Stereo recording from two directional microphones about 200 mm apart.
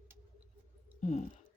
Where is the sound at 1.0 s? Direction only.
35° left (ahead or behind).